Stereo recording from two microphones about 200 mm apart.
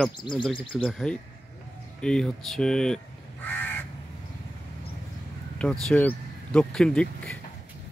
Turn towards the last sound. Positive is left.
turn(degrees=5)  # may be behind; listen again after turning